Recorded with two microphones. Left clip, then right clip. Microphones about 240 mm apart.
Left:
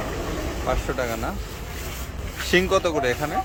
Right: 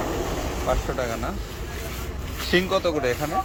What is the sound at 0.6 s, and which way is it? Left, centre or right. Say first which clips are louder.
Speech: left 1 dB; centre.